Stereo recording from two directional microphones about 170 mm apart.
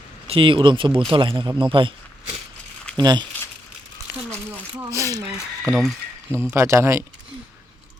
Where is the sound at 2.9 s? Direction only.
25° right (ahead or behind).